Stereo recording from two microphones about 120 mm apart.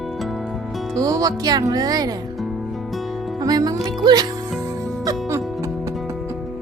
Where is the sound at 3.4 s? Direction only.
35° right (ahead or behind).